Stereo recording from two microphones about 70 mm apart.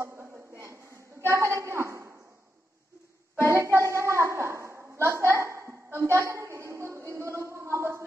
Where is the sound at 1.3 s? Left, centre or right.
Right.